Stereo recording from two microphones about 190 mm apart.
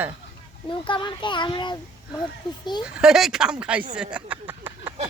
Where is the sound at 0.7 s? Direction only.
25° left (ahead or behind).